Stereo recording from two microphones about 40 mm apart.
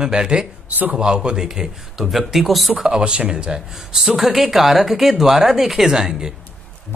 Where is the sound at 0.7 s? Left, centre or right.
Right.